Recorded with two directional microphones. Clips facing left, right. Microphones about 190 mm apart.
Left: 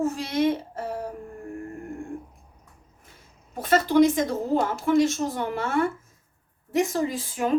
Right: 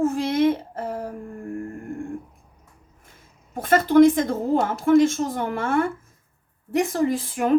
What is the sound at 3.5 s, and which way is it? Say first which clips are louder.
A woman's voice: right 3 dB; 50° right (ahead or behind).